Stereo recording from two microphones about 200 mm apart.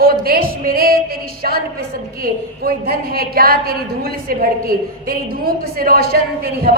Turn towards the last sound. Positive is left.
turn(degrees=-50)  # may be behind; listen again after turning